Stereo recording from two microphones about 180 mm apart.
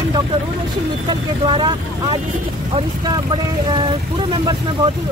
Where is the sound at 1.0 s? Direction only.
25° right (ahead or behind).